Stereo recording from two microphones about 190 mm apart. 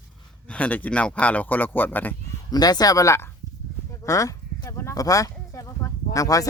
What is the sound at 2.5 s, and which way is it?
Speech, 20° left (ahead or behind).